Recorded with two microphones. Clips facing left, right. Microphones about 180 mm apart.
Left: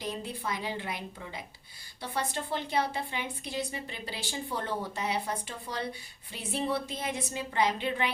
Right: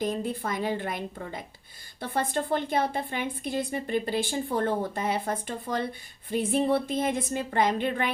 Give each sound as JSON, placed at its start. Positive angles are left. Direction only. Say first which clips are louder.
{"t": 0.0, "sound": "a woman's voice", "louder": "right 7 dB", "side_deg": -50}